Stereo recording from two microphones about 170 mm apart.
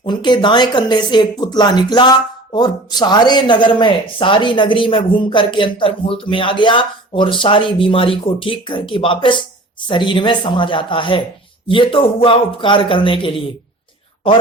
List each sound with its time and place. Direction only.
0.0 s a man's voice: 25° left (ahead or behind)